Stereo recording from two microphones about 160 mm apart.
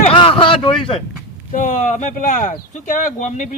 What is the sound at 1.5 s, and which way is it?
Speech, 50° left (ahead or behind).